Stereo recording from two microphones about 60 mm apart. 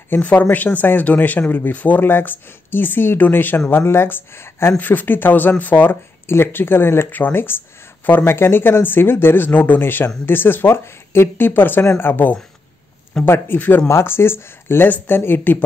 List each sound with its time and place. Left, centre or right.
0.1 s speech: left
4.7 s speech: left
7.1 s speech: left
13.8 s speech: left